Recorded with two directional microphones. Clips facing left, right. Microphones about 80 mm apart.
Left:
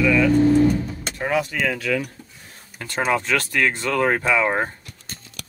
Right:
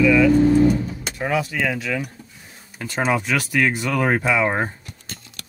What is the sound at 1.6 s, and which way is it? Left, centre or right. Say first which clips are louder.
Speech: left 1 dB; centre.